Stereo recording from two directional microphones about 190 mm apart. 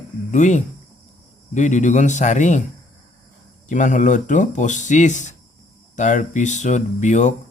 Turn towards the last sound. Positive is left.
turn(degrees=40)  # may be behind; listen again after turning